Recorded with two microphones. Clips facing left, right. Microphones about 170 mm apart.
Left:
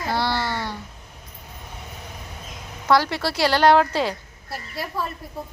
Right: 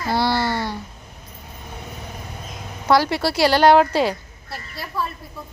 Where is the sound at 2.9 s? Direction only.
10° right (ahead or behind).